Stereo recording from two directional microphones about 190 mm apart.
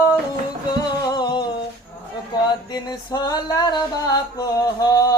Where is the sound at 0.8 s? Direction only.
20° left (ahead or behind).